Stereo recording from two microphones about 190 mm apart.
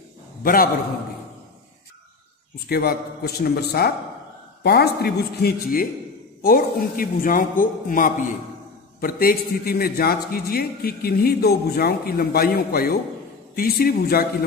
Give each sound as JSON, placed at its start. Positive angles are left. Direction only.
{"t": 0.4, "sound": "a man's voice", "side_deg": 50}
{"t": 2.7, "sound": "a man's voice", "side_deg": 55}